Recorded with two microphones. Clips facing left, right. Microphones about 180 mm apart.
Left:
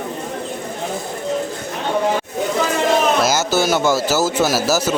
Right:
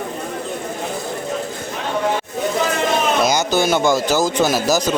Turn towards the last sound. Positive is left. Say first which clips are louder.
# even
turn(degrees=5)  # may be behind; listen again after turning